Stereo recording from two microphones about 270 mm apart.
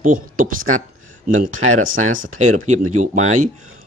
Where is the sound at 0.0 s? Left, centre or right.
Right.